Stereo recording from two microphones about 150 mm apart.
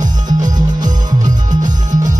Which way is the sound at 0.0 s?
25° right (ahead or behind).